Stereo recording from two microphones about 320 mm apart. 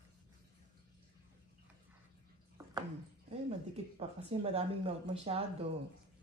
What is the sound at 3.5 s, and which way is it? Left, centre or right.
Speech, centre.